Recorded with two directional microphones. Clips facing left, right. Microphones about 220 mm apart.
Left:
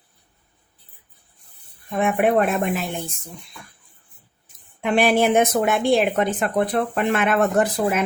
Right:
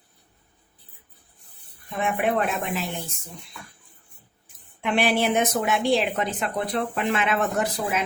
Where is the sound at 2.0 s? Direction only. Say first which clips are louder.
Left 5 dB; 50° left (ahead or behind).